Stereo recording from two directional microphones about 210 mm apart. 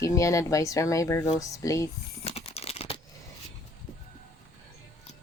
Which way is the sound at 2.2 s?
30° left (ahead or behind).